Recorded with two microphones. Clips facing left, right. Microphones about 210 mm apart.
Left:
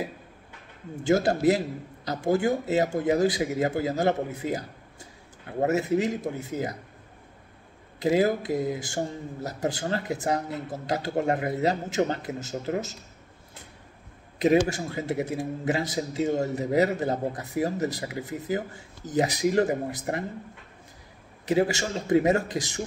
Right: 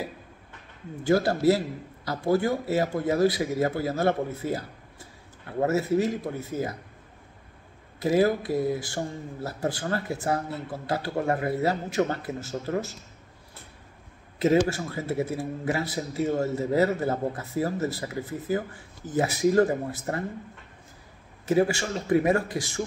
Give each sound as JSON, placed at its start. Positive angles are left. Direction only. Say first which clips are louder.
{"t": 1.0, "sound": "a man's voice", "louder": "even", "side_deg": 20}
{"t": 8.0, "sound": "speech", "louder": "even", "side_deg": 20}
{"t": 14.7, "sound": "a man's voice", "louder": "even", "side_deg": 20}
{"t": 21.5, "sound": "speech", "louder": "right 1 dB", "side_deg": 20}